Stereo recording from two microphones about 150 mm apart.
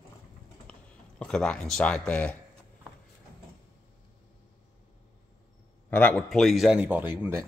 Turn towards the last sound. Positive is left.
turn(degrees=-15)  # may be behind; listen again after turning